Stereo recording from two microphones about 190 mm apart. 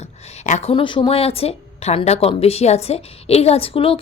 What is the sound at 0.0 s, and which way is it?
A woman's voice, 35° left (ahead or behind).